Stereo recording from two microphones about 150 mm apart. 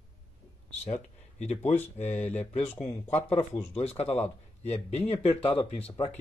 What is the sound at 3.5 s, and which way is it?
A man's voice, 45° left (ahead or behind).